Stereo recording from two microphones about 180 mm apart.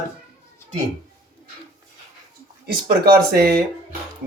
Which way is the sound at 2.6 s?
60° right (ahead or behind).